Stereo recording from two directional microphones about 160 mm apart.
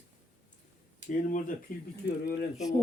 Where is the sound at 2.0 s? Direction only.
90° left.